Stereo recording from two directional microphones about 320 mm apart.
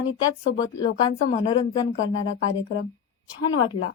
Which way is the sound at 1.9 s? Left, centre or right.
Left.